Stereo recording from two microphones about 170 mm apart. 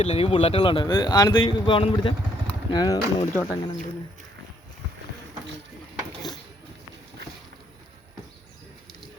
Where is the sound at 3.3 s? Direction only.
5° left (ahead or behind).